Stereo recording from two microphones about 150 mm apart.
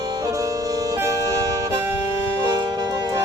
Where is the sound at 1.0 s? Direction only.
20° right (ahead or behind).